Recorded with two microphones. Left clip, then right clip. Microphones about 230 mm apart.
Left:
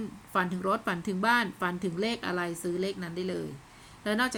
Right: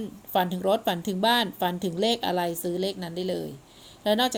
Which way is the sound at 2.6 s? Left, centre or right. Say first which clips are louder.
Right 3 dB; centre.